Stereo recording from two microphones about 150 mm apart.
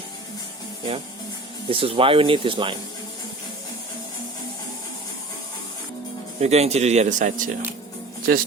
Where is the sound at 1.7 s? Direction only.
35° right (ahead or behind).